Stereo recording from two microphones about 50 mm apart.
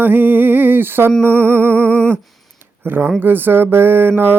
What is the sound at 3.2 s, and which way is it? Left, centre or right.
Mantra, right.